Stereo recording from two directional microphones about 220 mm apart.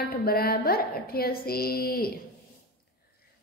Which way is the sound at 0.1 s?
45° left (ahead or behind).